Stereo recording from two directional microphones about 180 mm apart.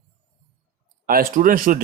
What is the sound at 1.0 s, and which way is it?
Speech, 50° right (ahead or behind).